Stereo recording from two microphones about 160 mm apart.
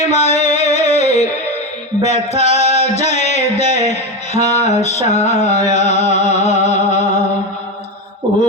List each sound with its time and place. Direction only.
0.1 s music: 45° left (ahead or behind)